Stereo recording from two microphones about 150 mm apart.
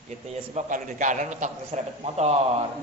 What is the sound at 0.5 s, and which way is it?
A man's voice, 55° right (ahead or behind).